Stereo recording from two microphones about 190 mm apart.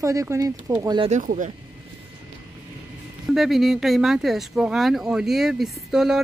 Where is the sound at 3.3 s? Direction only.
Centre (ahead or behind).